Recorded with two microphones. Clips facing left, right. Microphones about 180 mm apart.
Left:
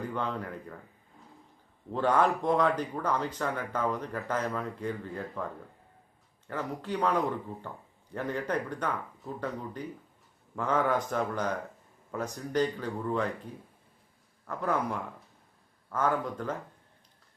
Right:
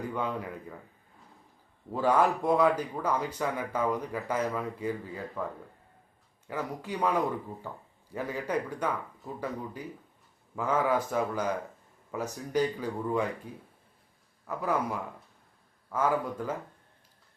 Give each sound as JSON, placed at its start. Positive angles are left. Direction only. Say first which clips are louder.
{"t": 0.0, "sound": "a man's voice", "louder": "right 1 dB", "side_deg": -10}
{"t": 1.9, "sound": "speech", "louder": "right 1 dB", "side_deg": -10}
{"t": 6.5, "sound": "speech", "louder": "left 1 dB", "side_deg": -10}
{"t": 14.4, "sound": "speech", "louder": "even", "side_deg": -5}